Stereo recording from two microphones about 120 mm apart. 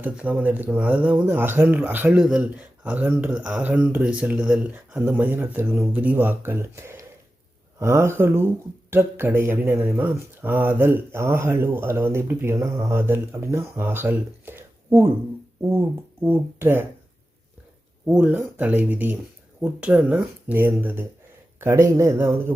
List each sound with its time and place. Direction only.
0.0 s speech: 15° right (ahead or behind)
18.0 s speech: 10° right (ahead or behind)